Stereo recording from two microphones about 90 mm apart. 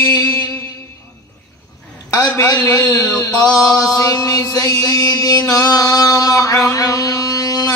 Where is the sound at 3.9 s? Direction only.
40° left (ahead or behind).